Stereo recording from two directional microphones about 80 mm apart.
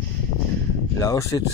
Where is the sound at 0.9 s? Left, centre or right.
Left.